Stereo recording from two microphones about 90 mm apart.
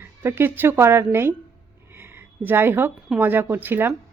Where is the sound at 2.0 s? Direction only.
20° right (ahead or behind).